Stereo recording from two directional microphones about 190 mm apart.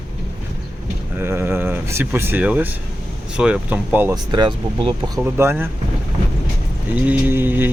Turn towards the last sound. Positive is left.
turn(degrees=-10)  # may be behind; listen again after turning